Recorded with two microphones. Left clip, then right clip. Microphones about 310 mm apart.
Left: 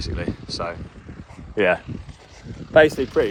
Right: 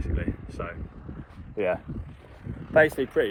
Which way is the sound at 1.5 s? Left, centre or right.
Left.